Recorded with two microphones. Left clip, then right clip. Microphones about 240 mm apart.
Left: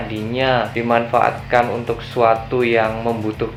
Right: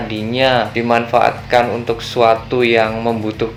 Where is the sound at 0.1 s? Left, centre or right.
Right.